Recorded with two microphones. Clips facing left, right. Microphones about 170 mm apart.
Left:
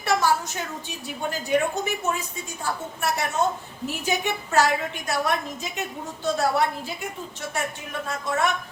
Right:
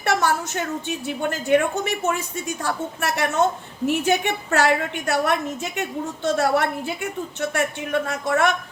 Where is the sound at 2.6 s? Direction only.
70° right (ahead or behind).